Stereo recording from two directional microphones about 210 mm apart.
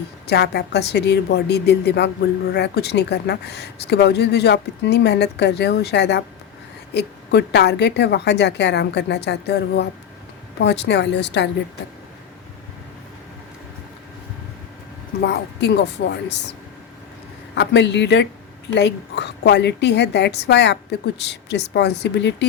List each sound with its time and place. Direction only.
0.3 s a woman's voice: 50° left (ahead or behind)
15.2 s a woman's voice: 55° left (ahead or behind)